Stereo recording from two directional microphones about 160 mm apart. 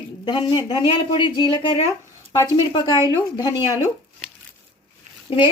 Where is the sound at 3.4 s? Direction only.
30° left (ahead or behind).